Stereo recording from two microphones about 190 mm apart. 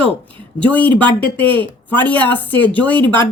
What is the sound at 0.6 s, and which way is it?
A woman's voice, 10° left (ahead or behind).